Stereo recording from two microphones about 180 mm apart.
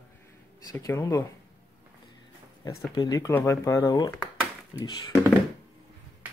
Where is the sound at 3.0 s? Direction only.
20° left (ahead or behind).